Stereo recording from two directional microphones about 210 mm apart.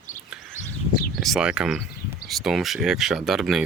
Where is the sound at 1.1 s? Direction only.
Centre (ahead or behind).